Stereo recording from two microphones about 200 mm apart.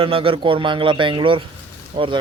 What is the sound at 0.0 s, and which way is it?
A man's voice, 25° right (ahead or behind).